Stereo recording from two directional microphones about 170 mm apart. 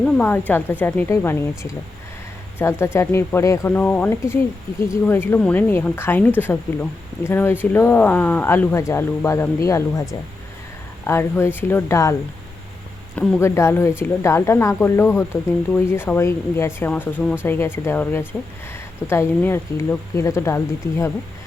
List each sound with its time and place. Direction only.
0.0 s speech: 10° left (ahead or behind)
13.1 s speech: 15° left (ahead or behind)